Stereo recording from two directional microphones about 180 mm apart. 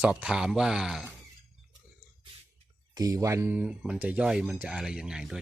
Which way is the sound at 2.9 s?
20° right (ahead or behind).